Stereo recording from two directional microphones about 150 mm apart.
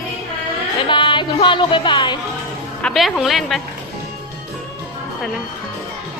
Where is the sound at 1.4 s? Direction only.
35° left (ahead or behind).